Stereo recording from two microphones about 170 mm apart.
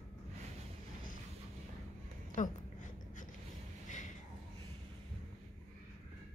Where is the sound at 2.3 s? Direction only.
50° left (ahead or behind).